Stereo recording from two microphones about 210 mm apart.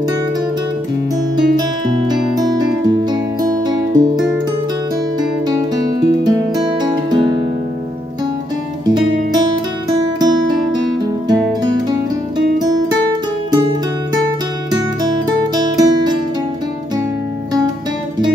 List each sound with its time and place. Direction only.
1.9 s music: 20° right (ahead or behind)
5.5 s music: 20° right (ahead or behind)
8.8 s music: 20° right (ahead or behind)
12.5 s music: 20° right (ahead or behind)
15.5 s music: 20° right (ahead or behind)